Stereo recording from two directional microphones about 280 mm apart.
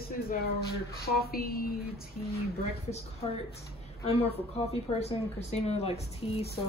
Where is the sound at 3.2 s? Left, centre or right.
Left.